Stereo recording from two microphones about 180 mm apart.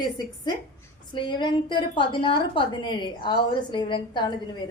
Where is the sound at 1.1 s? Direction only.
25° left (ahead or behind).